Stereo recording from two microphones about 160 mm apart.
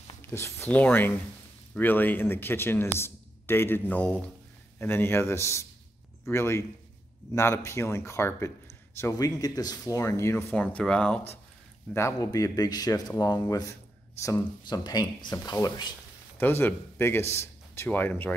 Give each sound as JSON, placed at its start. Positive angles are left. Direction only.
{"t": 0.2, "sound": "speech", "side_deg": 15}
{"t": 11.9, "sound": "a man's voice", "side_deg": 20}
{"t": 16.3, "sound": "a man's voice", "side_deg": 15}